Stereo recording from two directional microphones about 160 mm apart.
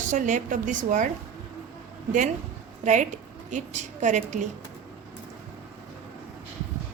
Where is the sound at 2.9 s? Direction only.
50° right (ahead or behind).